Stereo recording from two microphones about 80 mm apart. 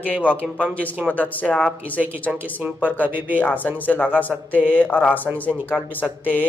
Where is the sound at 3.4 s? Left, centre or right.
Left.